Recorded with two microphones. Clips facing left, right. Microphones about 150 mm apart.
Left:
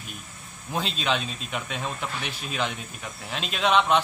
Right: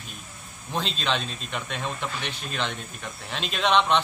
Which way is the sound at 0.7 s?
5° left (ahead or behind).